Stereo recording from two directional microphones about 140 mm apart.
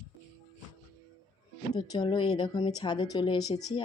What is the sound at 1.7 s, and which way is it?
Speech, 30° left (ahead or behind).